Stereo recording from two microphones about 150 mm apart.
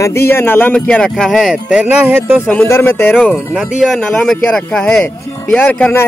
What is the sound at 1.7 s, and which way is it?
Speech, 10° right (ahead or behind).